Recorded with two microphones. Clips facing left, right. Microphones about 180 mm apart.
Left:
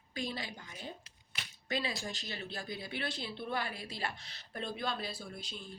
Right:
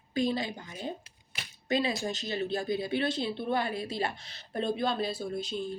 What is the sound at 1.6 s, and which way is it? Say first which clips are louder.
Speech: right 8 dB; 20° right (ahead or behind).